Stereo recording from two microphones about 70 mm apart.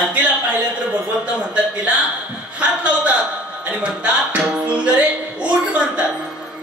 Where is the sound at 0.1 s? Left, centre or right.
Centre.